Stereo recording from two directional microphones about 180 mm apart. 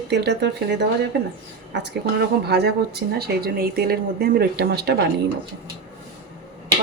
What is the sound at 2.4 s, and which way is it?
Speech, 65° right (ahead or behind).